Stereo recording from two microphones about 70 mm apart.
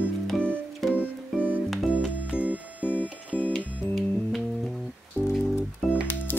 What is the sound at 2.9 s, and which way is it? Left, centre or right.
Music, left.